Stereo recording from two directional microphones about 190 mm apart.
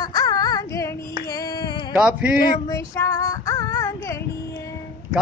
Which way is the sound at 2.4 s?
15° left (ahead or behind).